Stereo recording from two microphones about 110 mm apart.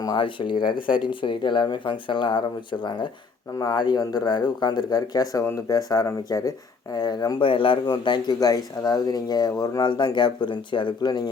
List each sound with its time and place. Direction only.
0.2 s speech: 50° left (ahead or behind)
3.6 s speech: 40° left (ahead or behind)
7.4 s speech: 50° left (ahead or behind)